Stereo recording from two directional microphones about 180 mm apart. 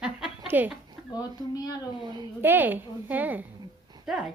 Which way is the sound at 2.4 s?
10° right (ahead or behind).